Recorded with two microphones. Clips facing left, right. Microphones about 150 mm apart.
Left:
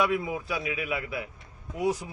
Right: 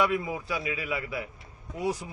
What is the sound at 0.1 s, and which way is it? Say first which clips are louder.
Speech: left 1 dB; 15° left (ahead or behind).